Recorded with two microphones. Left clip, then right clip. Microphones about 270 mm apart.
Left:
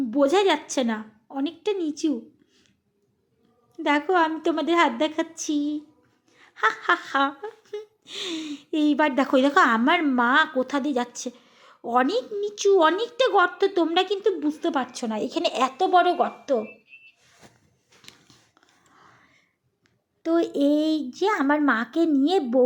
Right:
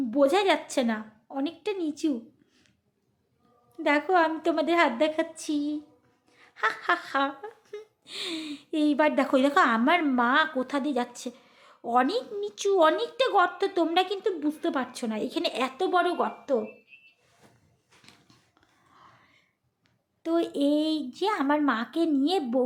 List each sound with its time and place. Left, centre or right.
0.1 s speech: centre
3.8 s speech: centre
17.4 s a sound: left
18.9 s whispering: centre
20.2 s speech: centre